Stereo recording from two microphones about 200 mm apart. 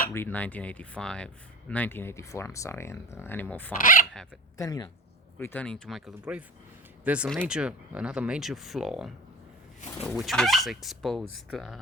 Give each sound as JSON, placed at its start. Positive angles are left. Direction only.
{"t": 0.1, "sound": "speech", "side_deg": 10}
{"t": 3.8, "sound": "speech", "side_deg": 45}
{"t": 4.5, "sound": "speech", "side_deg": 15}